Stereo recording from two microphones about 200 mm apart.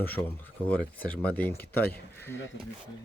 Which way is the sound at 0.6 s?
5° left (ahead or behind).